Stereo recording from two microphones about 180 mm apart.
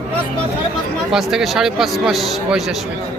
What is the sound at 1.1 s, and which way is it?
A man's voice, centre (ahead or behind).